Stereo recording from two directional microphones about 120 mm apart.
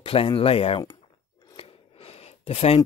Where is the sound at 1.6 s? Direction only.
60° left (ahead or behind).